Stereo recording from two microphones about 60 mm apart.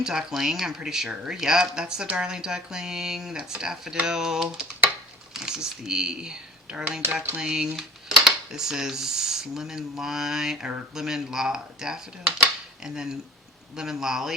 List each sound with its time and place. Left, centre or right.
0.0 s speech: centre
7.1 s dishes: right
7.4 s speech: centre